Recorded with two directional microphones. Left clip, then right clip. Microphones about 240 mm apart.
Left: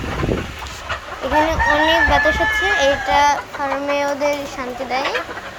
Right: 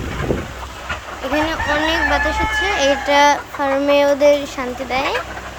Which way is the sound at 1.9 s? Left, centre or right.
Right.